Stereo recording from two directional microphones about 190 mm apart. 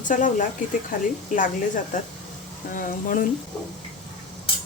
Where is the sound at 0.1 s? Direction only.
45° left (ahead or behind).